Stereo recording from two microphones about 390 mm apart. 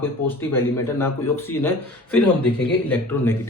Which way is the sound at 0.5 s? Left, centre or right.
Centre.